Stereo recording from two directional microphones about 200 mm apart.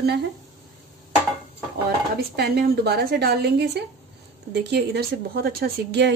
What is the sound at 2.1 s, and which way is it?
Speech, 55° right (ahead or behind).